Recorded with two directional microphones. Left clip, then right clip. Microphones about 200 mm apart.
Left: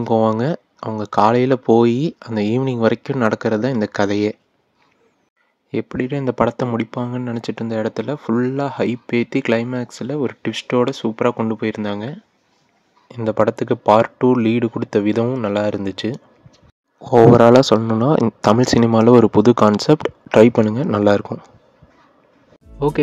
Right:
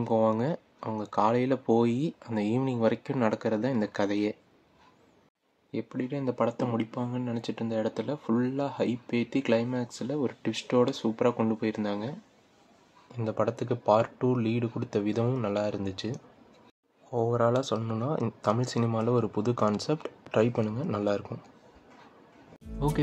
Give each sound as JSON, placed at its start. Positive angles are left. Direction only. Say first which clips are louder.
{"t": 0.0, "sound": "speech", "louder": "left 9 dB", "side_deg": 35}
{"t": 5.7, "sound": "speech", "louder": "left 12 dB", "side_deg": 45}